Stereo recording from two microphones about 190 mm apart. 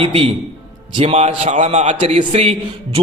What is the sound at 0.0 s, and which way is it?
A man's voice, 35° right (ahead or behind).